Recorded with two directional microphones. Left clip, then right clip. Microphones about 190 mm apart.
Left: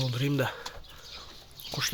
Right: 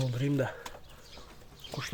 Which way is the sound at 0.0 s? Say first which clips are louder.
Left 2 dB; 5° left (ahead or behind).